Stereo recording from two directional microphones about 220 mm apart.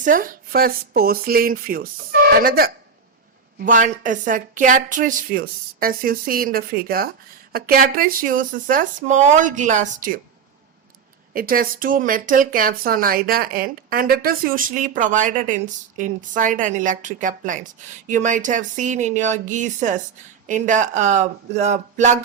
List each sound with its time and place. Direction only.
0.0 s speech: 40° right (ahead or behind)
11.3 s speech: 40° right (ahead or behind)